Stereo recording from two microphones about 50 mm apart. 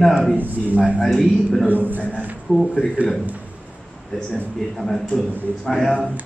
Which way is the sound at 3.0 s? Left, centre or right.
Right.